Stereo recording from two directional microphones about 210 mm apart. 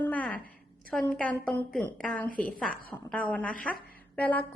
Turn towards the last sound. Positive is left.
turn(degrees=5)  # may be behind; listen again after turning